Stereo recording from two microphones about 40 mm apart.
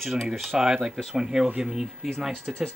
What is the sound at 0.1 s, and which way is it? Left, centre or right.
Speech, centre.